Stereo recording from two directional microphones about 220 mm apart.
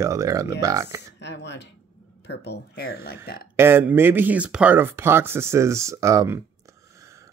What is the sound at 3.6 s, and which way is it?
Speech, 10° right (ahead or behind).